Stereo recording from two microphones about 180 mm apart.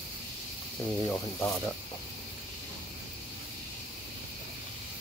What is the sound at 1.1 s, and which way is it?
Speech, 15° left (ahead or behind).